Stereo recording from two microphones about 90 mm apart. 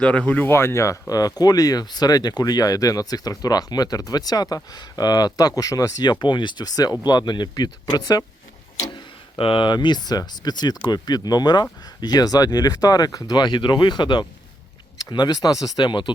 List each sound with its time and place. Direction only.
0.0 s speech: 15° left (ahead or behind); by 8.2 s 50° left (ahead or behind)
9.4 s speech: 75° left (ahead or behind); by 16.1 s 60° left (ahead or behind)